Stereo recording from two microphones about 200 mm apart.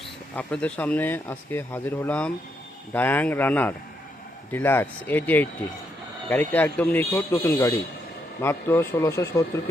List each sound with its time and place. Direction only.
0.3 s speech: 5° left (ahead or behind)